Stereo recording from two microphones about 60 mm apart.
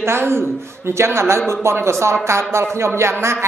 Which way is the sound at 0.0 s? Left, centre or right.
Right.